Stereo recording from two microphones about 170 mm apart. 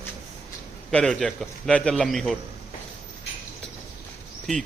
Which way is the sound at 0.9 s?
5° left (ahead or behind).